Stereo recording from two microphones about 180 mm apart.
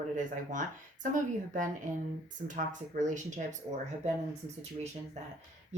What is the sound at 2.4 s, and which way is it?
Speech, 45° right (ahead or behind).